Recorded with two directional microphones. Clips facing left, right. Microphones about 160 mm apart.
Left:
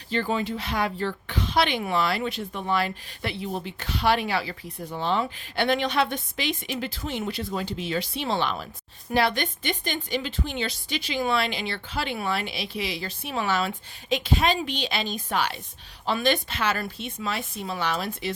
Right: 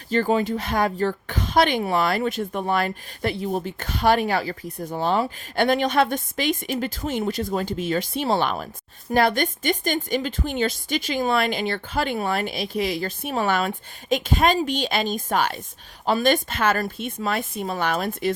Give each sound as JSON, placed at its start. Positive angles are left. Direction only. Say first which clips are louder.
{"t": 0.1, "sound": "a woman's voice", "louder": "right 5 dB", "side_deg": -45}